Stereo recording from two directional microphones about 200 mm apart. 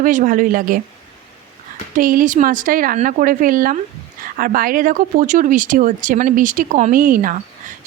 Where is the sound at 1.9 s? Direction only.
45° right (ahead or behind).